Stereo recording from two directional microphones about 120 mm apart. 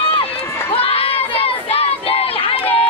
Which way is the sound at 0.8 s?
55° left (ahead or behind).